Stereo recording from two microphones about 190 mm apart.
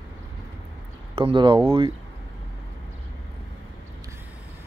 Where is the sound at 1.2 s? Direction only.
25° right (ahead or behind).